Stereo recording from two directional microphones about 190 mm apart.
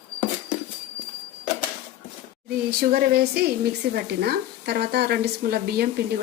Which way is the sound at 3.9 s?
55° right (ahead or behind).